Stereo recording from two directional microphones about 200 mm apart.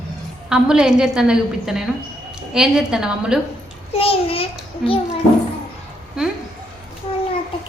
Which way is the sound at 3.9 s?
30° left (ahead or behind).